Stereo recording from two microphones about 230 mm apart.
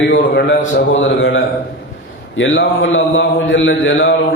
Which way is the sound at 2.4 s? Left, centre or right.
Left.